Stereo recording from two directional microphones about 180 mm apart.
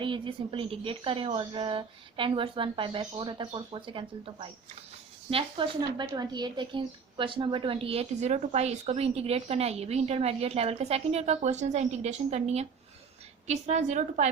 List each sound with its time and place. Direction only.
0.0 s a woman's voice: 25° right (ahead or behind)